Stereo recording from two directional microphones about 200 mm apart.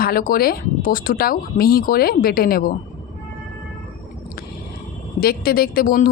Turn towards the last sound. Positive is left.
turn(degrees=45)  # may be behind; listen again after turning